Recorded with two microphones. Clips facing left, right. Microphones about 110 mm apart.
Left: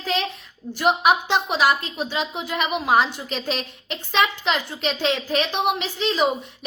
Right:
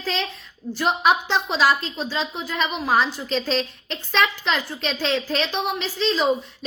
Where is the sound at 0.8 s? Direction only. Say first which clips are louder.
Left 1 dB; 15° left (ahead or behind).